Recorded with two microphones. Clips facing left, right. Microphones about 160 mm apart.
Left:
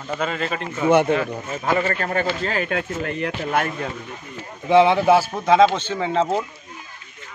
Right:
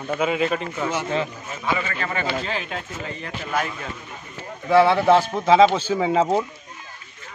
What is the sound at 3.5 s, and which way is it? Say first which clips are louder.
Speech: left 2 dB; 55° left (ahead or behind).